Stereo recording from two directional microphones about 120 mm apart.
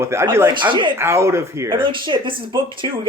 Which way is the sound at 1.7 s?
45° right (ahead or behind).